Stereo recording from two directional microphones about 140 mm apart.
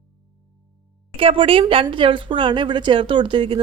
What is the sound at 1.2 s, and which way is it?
A woman's voice, 40° right (ahead or behind).